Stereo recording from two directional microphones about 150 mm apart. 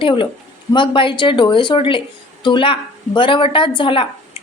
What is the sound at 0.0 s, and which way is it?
Speech, 35° left (ahead or behind).